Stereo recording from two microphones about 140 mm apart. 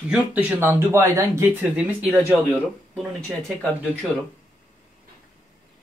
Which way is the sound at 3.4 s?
Centre (ahead or behind).